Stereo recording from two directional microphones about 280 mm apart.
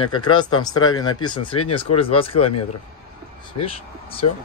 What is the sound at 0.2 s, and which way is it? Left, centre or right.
Speech, centre.